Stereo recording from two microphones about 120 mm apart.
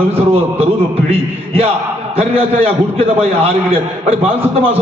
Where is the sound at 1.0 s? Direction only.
55° right (ahead or behind).